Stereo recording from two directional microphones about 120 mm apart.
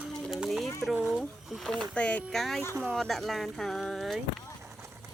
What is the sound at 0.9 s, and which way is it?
Speech, 10° right (ahead or behind).